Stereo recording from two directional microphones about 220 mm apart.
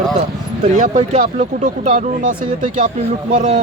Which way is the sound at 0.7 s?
35° right (ahead or behind).